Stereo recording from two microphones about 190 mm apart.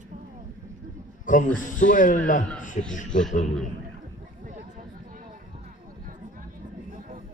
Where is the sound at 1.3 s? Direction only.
45° left (ahead or behind).